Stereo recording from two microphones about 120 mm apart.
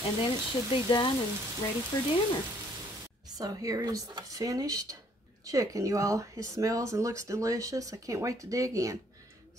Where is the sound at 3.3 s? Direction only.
30° right (ahead or behind).